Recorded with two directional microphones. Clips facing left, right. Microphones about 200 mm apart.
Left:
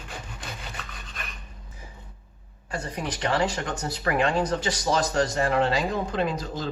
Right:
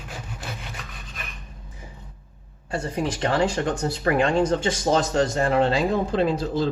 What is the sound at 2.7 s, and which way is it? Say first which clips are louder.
Speech: right 5 dB; 30° right (ahead or behind).